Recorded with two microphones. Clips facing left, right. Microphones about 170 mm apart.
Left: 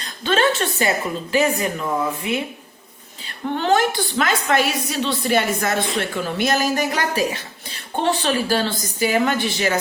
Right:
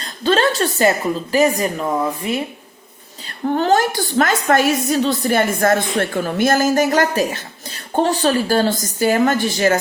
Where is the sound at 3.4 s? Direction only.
40° right (ahead or behind).